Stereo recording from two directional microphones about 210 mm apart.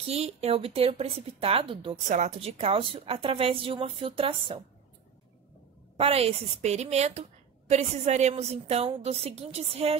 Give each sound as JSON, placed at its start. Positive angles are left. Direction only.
{"t": 0.0, "sound": "a woman's voice", "side_deg": -30}
{"t": 5.9, "sound": "a woman's voice", "side_deg": -30}